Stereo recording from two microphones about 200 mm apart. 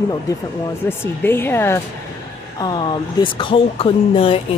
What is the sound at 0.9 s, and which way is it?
Speech, 10° left (ahead or behind).